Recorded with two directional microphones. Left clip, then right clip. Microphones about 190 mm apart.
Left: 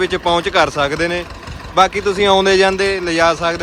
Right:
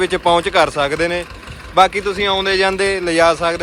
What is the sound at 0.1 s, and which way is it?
Speech, 10° left (ahead or behind).